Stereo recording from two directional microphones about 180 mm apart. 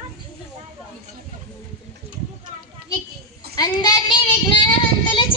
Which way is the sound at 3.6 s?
25° left (ahead or behind).